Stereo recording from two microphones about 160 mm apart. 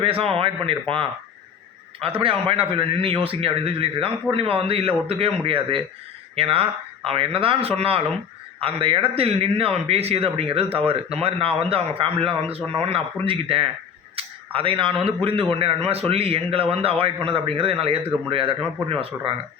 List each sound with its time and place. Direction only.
0.0 s a man's voice: 35° right (ahead or behind)